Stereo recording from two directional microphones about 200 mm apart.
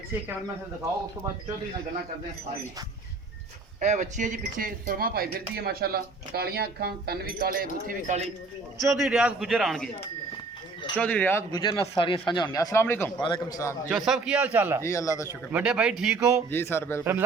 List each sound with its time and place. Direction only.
3.8 s speech: 35° right (ahead or behind)
8.8 s a man's voice: centre (ahead or behind)
10.9 s speech: 5° left (ahead or behind)
11.5 s speech: 25° left (ahead or behind)
13.9 s a man's voice: 5° right (ahead or behind)
14.8 s speech: 15° left (ahead or behind)
15.5 s a man's voice: 5° right (ahead or behind)
16.5 s speech: 10° left (ahead or behind)
17.0 s speech: 10° right (ahead or behind)